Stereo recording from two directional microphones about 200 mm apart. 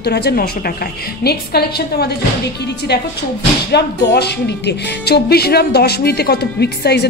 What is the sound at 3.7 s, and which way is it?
Speech, 55° left (ahead or behind).